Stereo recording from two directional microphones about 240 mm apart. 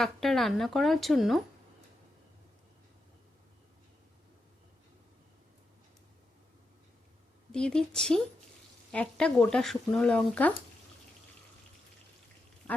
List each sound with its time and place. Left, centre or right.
0.0 s speech: centre
7.5 s speech: centre
12.7 s quack: centre